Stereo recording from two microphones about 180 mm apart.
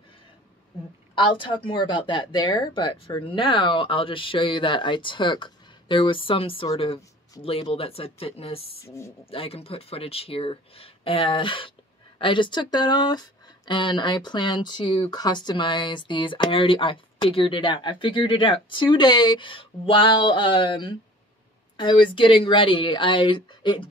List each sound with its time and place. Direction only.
1.1 s speech: 30° left (ahead or behind)
8.8 s speech: 15° left (ahead or behind)
9.2 s speech: 30° left (ahead or behind)